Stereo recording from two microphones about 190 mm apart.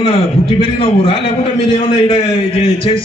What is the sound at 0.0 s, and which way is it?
A man's voice, 30° left (ahead or behind).